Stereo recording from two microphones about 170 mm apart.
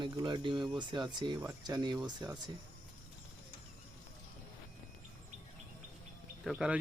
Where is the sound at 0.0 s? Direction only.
25° right (ahead or behind).